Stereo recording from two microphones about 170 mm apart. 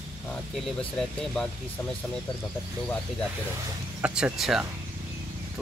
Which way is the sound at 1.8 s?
15° left (ahead or behind).